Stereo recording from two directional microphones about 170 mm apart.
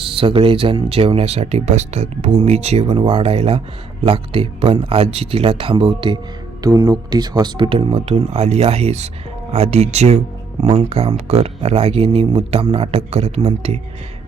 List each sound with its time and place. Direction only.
0.0 s speech: 35° right (ahead or behind)